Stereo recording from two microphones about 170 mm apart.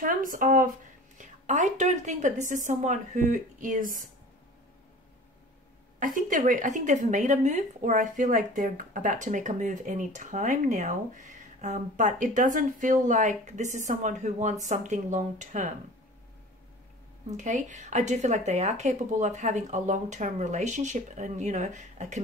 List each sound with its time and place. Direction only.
0.0 s a woman's voice: 55° right (ahead or behind)
5.9 s a woman's voice: 50° right (ahead or behind)
17.3 s a woman's voice: 45° right (ahead or behind)